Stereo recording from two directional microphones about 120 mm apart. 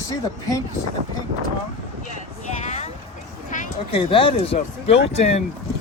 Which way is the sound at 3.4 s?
90° left.